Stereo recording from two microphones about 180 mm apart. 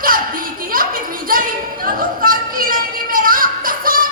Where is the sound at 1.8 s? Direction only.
50° right (ahead or behind).